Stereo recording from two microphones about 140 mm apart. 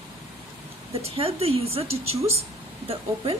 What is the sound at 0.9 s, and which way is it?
A woman's voice, 45° right (ahead or behind).